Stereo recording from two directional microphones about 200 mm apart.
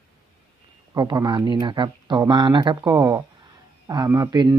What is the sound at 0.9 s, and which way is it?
Speech, 20° right (ahead or behind).